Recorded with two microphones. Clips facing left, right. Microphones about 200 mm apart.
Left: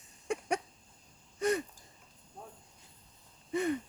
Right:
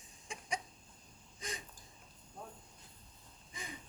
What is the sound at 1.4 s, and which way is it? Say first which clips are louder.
Wheeze: left 17 dB; 65° left (ahead or behind).